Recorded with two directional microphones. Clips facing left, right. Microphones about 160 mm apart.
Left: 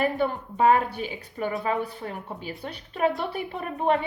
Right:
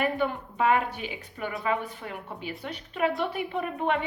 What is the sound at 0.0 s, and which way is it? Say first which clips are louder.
A woman's voice: left 2 dB; 40° left (ahead or behind).